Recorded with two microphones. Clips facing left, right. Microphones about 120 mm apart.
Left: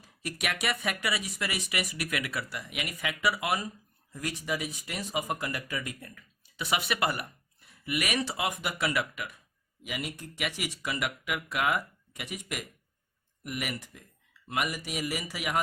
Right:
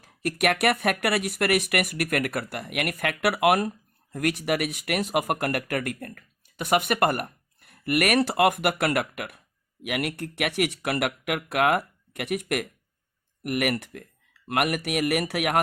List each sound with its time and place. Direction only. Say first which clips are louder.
0.0 s speech: right 10 dB; 55° right (ahead or behind)